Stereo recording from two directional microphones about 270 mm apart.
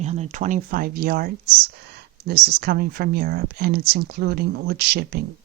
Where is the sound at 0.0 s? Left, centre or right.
Right.